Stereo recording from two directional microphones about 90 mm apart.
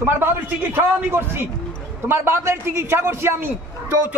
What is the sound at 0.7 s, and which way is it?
A man's voice, 25° right (ahead or behind).